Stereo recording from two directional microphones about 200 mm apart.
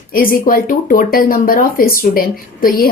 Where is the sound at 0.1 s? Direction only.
45° left (ahead or behind).